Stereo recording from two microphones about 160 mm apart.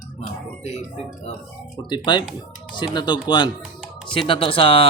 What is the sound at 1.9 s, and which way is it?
Speech, 25° left (ahead or behind).